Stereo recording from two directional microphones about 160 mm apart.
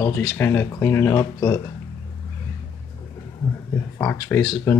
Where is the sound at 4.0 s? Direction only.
15° left (ahead or behind).